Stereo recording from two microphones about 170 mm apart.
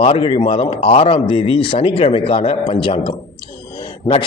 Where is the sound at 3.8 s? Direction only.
30° left (ahead or behind).